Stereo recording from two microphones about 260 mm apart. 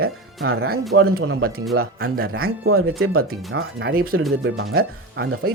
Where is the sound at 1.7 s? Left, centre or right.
Right.